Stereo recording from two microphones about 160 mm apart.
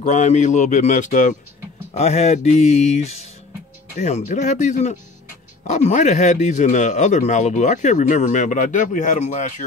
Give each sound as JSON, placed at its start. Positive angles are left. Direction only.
{"t": 0.0, "sound": "speech", "side_deg": 50}